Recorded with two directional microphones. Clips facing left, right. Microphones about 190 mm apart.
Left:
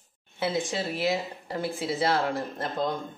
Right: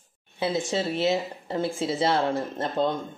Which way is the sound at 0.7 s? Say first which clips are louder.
Right 3 dB; 25° right (ahead or behind).